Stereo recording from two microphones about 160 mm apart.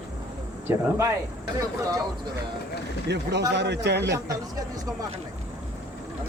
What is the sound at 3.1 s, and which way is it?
A man's voice, 90° right.